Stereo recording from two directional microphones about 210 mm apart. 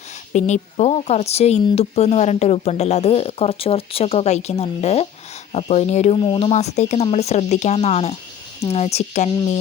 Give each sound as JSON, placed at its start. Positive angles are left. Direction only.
{"t": 0.3, "sound": "speech", "side_deg": 35}